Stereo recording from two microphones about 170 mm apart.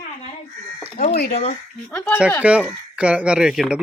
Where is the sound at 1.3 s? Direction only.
40° left (ahead or behind).